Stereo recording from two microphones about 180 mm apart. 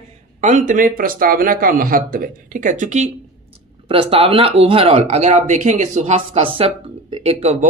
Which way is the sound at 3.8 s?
30° right (ahead or behind).